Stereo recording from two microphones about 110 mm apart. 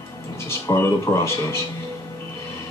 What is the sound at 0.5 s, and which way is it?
Speech, 25° left (ahead or behind).